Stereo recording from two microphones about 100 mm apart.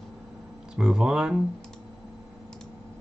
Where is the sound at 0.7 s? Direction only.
5° right (ahead or behind).